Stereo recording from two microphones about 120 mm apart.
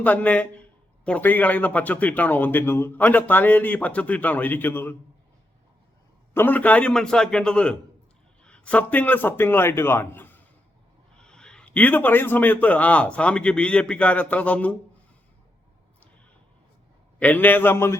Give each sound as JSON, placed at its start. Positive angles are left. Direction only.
{"t": 0.0, "sound": "speech", "side_deg": 15}
{"t": 6.3, "sound": "a man's voice", "side_deg": 15}
{"t": 11.2, "sound": "speech", "side_deg": 5}
{"t": 17.2, "sound": "speech", "side_deg": 15}